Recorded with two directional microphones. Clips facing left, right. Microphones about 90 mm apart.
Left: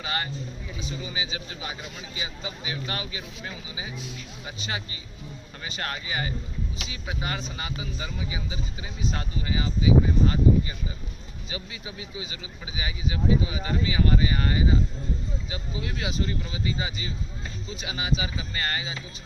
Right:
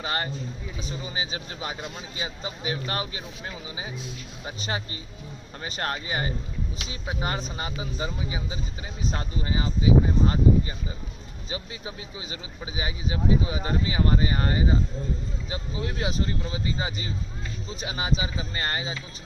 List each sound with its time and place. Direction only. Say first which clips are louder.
0.0 s speech: right 2 dB; 35° right (ahead or behind)
11.5 s speech: right 2 dB; 35° right (ahead or behind)